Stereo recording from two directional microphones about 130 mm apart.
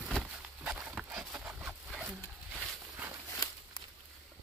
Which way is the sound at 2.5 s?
15° right (ahead or behind).